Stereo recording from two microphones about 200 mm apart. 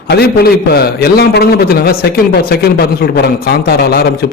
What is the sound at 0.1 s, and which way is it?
A man's voice, 50° left (ahead or behind).